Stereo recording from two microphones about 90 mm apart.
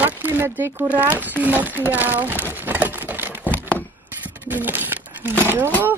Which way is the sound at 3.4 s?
20° left (ahead or behind).